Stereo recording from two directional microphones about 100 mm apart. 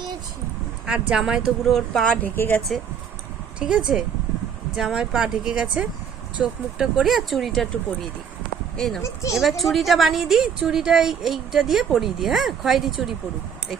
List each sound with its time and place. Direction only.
0.9 s a woman's voice: 10° right (ahead or behind); by 2.3 s 10° left (ahead or behind)
2.3 s speech: 20° left (ahead or behind)
3.6 s a woman's voice: 5° right (ahead or behind)
8.7 s speech: 5° left (ahead or behind)
9.0 s speech: 30° left (ahead or behind)
9.4 s a woman's voice: centre (ahead or behind)